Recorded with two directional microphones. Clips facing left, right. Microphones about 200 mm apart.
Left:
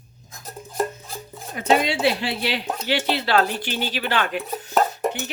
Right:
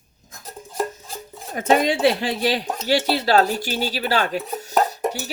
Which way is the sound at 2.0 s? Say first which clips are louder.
Right 3 dB; 50° right (ahead or behind).